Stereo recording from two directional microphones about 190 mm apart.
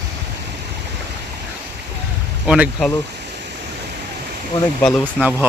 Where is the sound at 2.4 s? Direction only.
5° right (ahead or behind).